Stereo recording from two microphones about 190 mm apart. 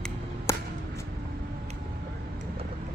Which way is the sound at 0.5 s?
15° left (ahead or behind).